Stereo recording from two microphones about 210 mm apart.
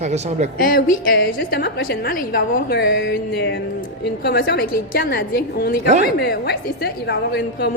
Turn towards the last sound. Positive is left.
turn(degrees=50)  # may be behind; listen again after turning